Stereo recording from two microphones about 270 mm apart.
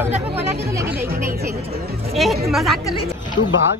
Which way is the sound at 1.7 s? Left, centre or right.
Right.